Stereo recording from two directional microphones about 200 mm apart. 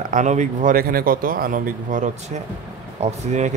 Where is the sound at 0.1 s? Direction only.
35° right (ahead or behind).